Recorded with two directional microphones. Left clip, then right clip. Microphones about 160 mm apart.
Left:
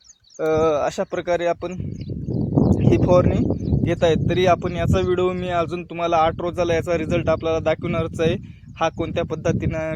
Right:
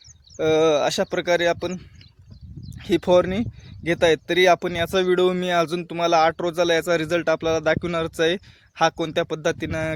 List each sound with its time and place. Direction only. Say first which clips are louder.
0.3 s speech: right 1 dB; 30° right (ahead or behind)
2.8 s speech: right 1 dB; 20° right (ahead or behind)
8.8 s speech: right 2 dB; 30° right (ahead or behind)
9.1 s speech: even; 15° right (ahead or behind)